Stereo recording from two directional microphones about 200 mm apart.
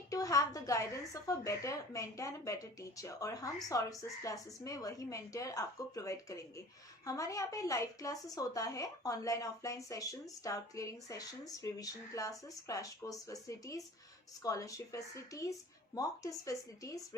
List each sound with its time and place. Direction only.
0.1 s speech: 15° left (ahead or behind)